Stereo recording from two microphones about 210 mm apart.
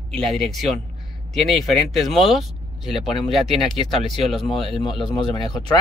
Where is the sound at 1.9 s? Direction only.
Centre (ahead or behind).